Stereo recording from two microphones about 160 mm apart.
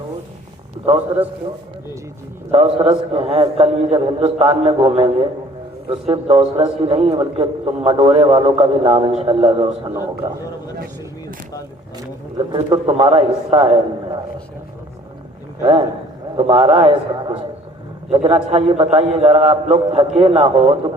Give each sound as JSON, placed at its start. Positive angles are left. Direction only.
{"t": 2.5, "sound": "a man's voice", "side_deg": -35}
{"t": 10.2, "sound": "speech", "side_deg": -20}
{"t": 12.4, "sound": "a man's voice", "side_deg": -25}
{"t": 16.4, "sound": "a man's voice", "side_deg": -35}